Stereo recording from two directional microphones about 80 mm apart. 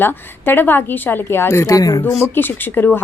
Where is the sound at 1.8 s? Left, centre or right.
Left.